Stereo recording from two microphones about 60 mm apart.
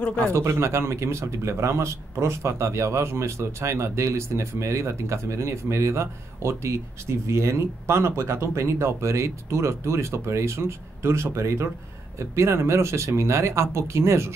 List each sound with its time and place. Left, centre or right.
0.0 s speech: left
0.3 s speech: right